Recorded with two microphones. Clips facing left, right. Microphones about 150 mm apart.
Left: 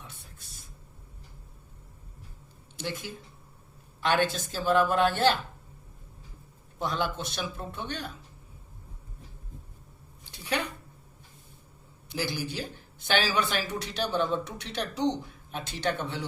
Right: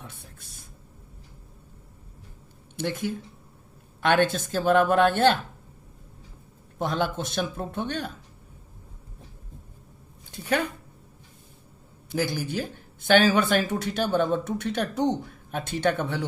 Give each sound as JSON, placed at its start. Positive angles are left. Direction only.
{"t": 0.0, "sound": "a sound", "side_deg": -55}
{"t": 2.7, "sound": "speech", "side_deg": -55}
{"t": 6.7, "sound": "speech", "side_deg": -50}
{"t": 10.3, "sound": "speech", "side_deg": -50}
{"t": 12.0, "sound": "speech", "side_deg": -50}